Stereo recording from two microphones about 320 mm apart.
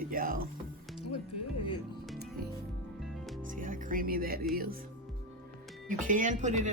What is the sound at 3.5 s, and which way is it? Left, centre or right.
Music, right.